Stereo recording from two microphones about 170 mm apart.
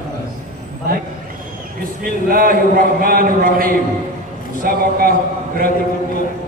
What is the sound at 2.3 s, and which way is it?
A man's voice, 55° right (ahead or behind).